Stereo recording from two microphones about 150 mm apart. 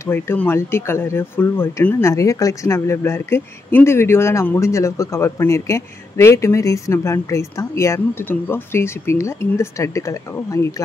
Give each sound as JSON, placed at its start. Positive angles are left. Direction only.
{"t": 0.0, "sound": "speech", "side_deg": 15}